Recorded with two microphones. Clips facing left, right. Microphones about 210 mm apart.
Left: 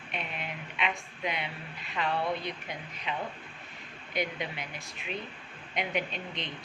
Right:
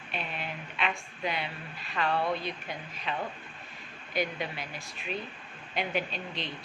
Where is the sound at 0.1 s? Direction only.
30° right (ahead or behind).